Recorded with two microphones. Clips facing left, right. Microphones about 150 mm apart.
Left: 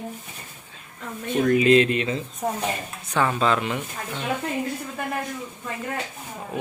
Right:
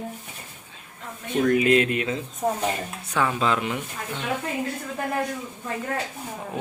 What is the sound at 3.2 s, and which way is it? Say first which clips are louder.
Speech: left 2 dB; 5° right (ahead or behind).